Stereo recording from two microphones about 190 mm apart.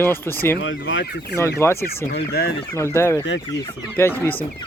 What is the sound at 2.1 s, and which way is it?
Speech, 55° left (ahead or behind).